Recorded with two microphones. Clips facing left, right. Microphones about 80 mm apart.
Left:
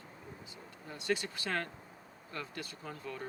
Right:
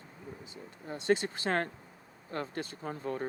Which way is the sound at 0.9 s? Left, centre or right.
Right.